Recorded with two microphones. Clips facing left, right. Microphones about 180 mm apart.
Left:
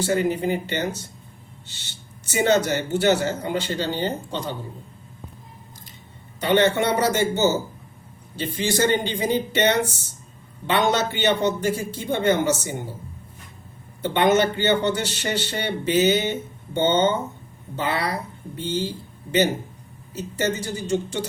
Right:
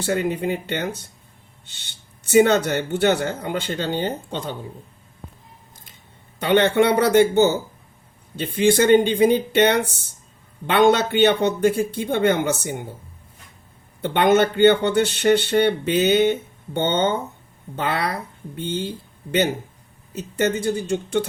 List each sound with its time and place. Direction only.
0.0 s speech: 60° right (ahead or behind)
1.6 s speech: 55° right (ahead or behind)
6.4 s speech: 60° right (ahead or behind)
14.0 s speech: 55° right (ahead or behind)
20.1 s speech: 55° right (ahead or behind)